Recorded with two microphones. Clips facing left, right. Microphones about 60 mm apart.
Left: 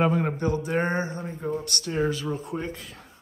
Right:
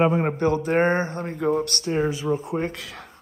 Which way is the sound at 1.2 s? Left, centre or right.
Right.